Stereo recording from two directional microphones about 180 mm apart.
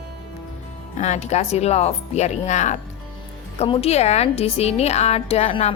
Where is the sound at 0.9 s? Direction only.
40° left (ahead or behind).